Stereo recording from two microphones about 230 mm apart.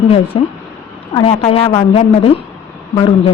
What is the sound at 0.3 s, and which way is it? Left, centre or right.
A woman's voice, left.